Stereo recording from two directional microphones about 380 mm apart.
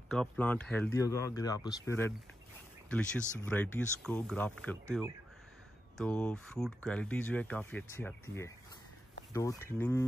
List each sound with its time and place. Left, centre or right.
0.1 s speech: centre
4.8 s speech: centre